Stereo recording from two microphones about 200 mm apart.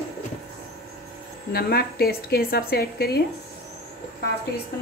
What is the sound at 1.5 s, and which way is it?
A woman's voice, 50° left (ahead or behind).